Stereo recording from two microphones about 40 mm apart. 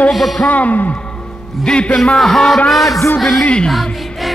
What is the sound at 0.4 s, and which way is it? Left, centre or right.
Speech, left.